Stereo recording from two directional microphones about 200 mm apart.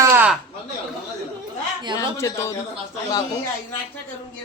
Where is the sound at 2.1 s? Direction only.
15° left (ahead or behind).